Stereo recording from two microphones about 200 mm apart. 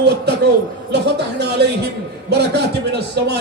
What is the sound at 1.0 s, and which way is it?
A man's voice, 55° right (ahead or behind).